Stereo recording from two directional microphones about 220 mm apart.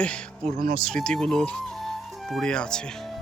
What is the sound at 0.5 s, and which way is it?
Speech, 40° right (ahead or behind).